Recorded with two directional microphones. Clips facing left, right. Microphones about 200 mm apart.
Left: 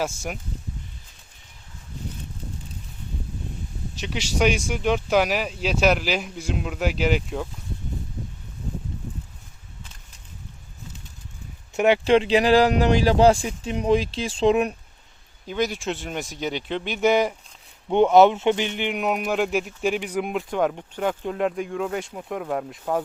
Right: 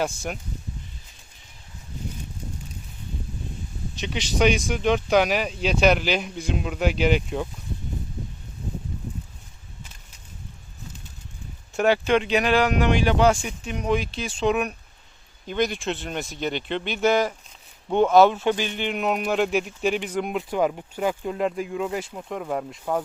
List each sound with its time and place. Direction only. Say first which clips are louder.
0.0 s speech: right 1 dB; 5° left (ahead or behind)
4.0 s speech: right 1 dB; 5° left (ahead or behind)
11.8 s speech: left 2 dB; 25° left (ahead or behind)
15.4 s speech: even; 5° left (ahead or behind)